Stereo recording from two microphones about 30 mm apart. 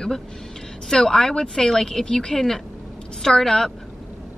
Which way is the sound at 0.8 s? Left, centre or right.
Centre.